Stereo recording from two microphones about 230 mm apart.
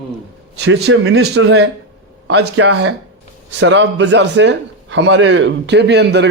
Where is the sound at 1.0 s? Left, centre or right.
Right.